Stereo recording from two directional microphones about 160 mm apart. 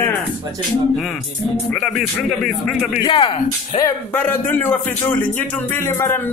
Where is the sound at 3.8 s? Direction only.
10° left (ahead or behind).